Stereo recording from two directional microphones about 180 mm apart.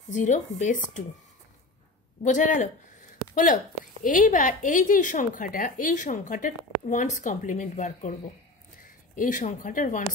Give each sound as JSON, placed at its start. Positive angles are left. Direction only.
{"t": 0.1, "sound": "a woman's voice", "side_deg": 45}
{"t": 2.2, "sound": "a woman's voice", "side_deg": 45}